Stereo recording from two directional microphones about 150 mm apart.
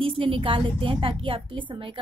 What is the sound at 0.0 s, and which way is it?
A woman's voice, 35° right (ahead or behind).